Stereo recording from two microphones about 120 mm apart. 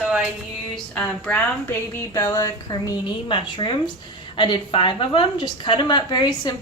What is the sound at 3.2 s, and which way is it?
A woman's voice, 45° left (ahead or behind).